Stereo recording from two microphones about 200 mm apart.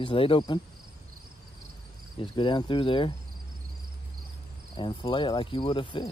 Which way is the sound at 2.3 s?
25° left (ahead or behind).